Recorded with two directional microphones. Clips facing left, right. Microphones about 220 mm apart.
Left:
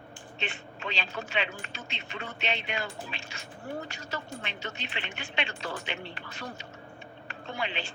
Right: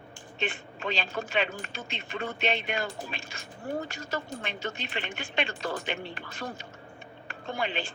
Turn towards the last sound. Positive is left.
turn(degrees=-50)  # may be behind; listen again after turning